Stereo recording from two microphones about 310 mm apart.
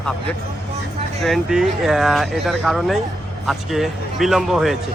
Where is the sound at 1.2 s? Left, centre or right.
Centre.